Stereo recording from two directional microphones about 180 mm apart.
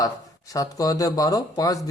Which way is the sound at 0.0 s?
20° left (ahead or behind).